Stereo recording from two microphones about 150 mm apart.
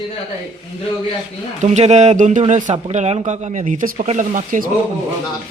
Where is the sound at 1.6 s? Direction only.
50° right (ahead or behind).